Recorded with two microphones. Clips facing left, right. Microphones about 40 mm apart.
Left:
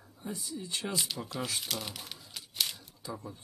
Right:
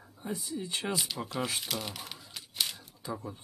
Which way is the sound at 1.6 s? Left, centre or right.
Centre.